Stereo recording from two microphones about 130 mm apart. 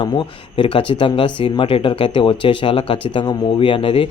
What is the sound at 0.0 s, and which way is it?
Speech, 40° left (ahead or behind).